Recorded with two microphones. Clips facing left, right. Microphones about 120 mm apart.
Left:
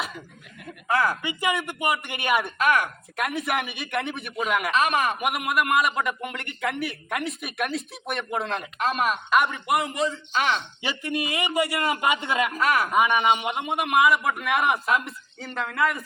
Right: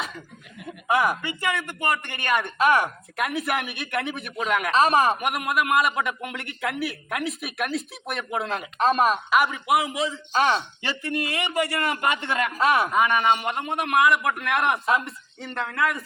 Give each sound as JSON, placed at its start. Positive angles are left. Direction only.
{"t": 0.9, "sound": "speech", "side_deg": -15}
{"t": 1.2, "sound": "a man's voice", "side_deg": 15}
{"t": 2.6, "sound": "speech", "side_deg": -30}
{"t": 3.2, "sound": "a man's voice", "side_deg": 0}
{"t": 4.7, "sound": "a man's voice", "side_deg": -35}
{"t": 5.2, "sound": "a man's voice", "side_deg": 0}
{"t": 8.8, "sound": "a man's voice", "side_deg": -35}
{"t": 9.3, "sound": "a man's voice", "side_deg": -5}
{"t": 10.3, "sound": "a man's voice", "side_deg": -35}
{"t": 10.8, "sound": "a man's voice", "side_deg": 15}
{"t": 12.5, "sound": "speech", "side_deg": -25}
{"t": 12.9, "sound": "a man's voice", "side_deg": 10}